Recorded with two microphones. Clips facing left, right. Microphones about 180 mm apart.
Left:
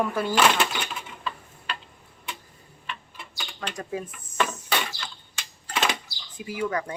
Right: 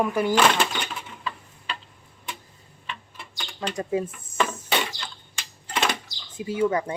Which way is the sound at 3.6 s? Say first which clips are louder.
Right 6 dB; 25° right (ahead or behind).